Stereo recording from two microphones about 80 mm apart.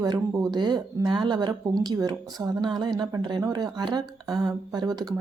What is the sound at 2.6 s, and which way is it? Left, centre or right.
Speech, right.